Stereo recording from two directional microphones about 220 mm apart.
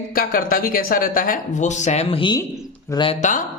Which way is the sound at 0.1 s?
40° left (ahead or behind).